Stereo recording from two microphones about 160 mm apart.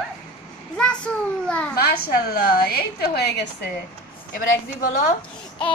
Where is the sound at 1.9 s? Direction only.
70° left (ahead or behind); by 3.4 s 90° left.